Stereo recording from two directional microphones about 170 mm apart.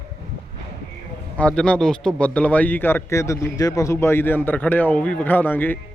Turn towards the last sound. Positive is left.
turn(degrees=10)  # may be behind; listen again after turning